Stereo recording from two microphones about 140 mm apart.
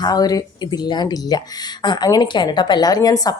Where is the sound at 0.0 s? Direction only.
30° left (ahead or behind).